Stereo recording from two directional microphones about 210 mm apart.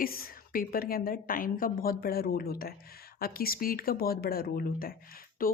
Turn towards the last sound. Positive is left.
turn(degrees=40)  # may be behind; listen again after turning